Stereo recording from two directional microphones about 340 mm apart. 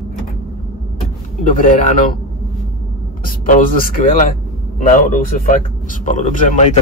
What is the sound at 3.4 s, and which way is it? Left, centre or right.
A man's voice, left.